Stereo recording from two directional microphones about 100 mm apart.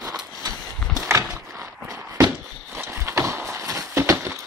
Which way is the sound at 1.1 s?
35° right (ahead or behind).